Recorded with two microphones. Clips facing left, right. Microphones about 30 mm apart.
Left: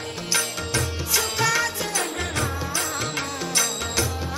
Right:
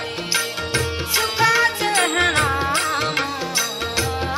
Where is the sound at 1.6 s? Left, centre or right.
Right.